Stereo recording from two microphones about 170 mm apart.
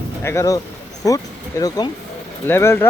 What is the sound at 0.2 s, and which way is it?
Speech, 15° left (ahead or behind).